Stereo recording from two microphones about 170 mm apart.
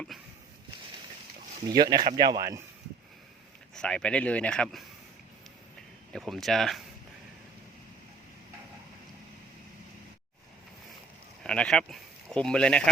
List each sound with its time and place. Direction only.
1.6 s speech: 25° right (ahead or behind)
3.8 s speech: 5° left (ahead or behind)
6.1 s speech: centre (ahead or behind)
11.4 s speech: 5° left (ahead or behind)